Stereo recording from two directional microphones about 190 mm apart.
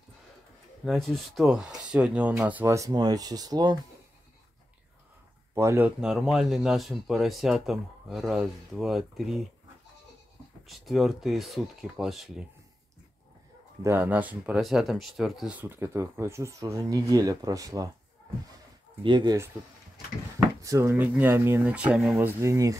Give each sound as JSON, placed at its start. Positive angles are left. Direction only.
{"t": 0.8, "sound": "speech", "side_deg": 0}
{"t": 5.5, "sound": "speech", "side_deg": -15}
{"t": 10.7, "sound": "speech", "side_deg": 0}
{"t": 13.8, "sound": "speech", "side_deg": -10}
{"t": 19.0, "sound": "speech", "side_deg": -20}
{"t": 20.6, "sound": "speech", "side_deg": -15}